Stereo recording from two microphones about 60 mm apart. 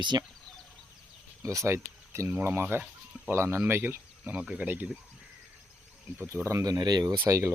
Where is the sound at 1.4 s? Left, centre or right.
Right.